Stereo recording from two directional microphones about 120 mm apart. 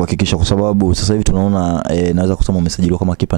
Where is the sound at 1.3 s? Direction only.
20° right (ahead or behind).